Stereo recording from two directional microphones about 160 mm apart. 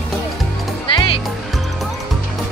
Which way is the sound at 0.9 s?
35° left (ahead or behind).